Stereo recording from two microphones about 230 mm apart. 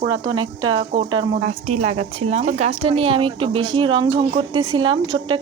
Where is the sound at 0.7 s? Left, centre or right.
Right.